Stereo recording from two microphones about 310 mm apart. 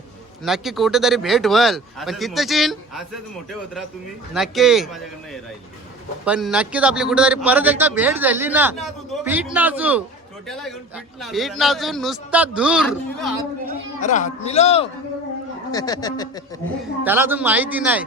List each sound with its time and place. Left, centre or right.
0.4 s a man's voice: centre
4.4 s a man's voice: centre
14.0 s a man's voice: left
17.0 s a man's voice: centre